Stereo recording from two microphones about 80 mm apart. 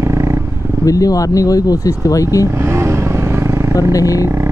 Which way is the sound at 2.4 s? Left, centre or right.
Right.